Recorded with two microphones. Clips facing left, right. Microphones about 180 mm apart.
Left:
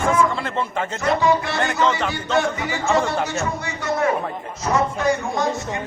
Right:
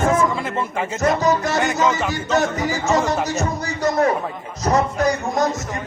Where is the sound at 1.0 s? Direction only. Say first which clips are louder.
Right 1 dB; 40° right (ahead or behind).